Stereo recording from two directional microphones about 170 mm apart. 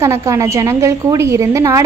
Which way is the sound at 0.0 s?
15° right (ahead or behind).